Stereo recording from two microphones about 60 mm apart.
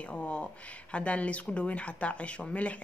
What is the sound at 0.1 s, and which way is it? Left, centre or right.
A woman's voice, centre.